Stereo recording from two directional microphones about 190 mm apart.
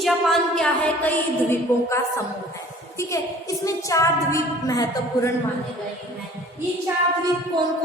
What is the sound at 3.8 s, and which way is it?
A woman's voice, 15° left (ahead or behind).